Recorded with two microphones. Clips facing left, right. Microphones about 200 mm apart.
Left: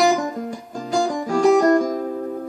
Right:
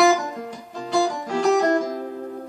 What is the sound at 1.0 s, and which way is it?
Music, 45° left (ahead or behind).